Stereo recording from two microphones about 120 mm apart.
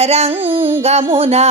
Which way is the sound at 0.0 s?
60° right (ahead or behind).